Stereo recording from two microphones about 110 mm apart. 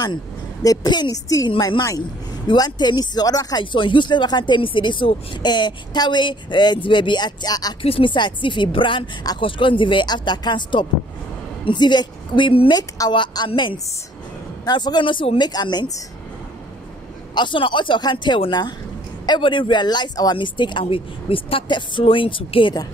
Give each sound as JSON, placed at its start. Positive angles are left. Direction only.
{"t": 0.0, "sound": "speech", "side_deg": 35}
{"t": 7.8, "sound": "speech", "side_deg": 55}
{"t": 17.3, "sound": "speech", "side_deg": 45}